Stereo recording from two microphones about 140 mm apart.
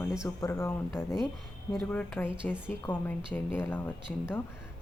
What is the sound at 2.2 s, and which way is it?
Speech, 15° left (ahead or behind).